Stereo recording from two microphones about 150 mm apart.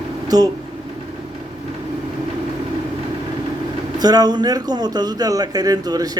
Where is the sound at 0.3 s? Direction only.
25° right (ahead or behind).